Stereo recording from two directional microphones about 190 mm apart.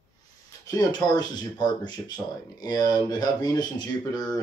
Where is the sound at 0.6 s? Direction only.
20° left (ahead or behind).